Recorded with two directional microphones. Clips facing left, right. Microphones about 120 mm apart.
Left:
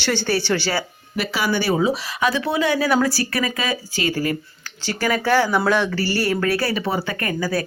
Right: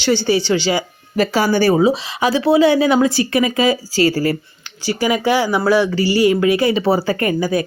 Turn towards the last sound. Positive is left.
turn(degrees=-20)  # may be behind; listen again after turning